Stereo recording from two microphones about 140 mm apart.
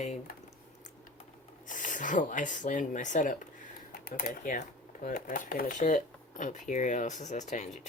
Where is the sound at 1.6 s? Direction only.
65° left (ahead or behind).